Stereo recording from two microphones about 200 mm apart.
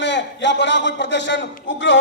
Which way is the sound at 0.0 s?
60° left (ahead or behind).